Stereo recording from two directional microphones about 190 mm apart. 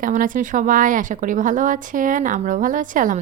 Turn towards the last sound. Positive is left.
turn(degrees=-45)  # may be behind; listen again after turning